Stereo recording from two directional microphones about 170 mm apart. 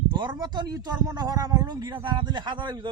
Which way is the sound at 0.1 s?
25° right (ahead or behind).